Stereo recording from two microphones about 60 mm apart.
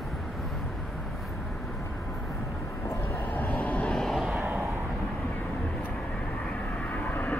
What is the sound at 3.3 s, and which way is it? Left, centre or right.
Vehicle, left.